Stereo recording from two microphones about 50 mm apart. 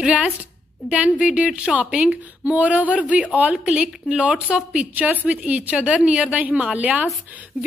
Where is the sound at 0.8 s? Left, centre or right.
Right.